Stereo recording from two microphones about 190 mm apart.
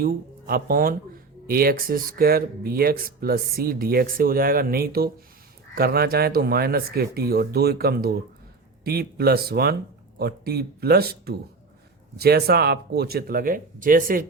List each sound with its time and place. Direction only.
0.0 s speech: 50° right (ahead or behind)